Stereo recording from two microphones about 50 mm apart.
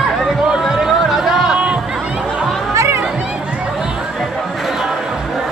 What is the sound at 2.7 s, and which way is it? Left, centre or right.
Music, right.